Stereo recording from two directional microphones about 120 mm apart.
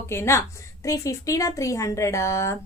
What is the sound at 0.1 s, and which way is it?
A woman's voice, 20° left (ahead or behind).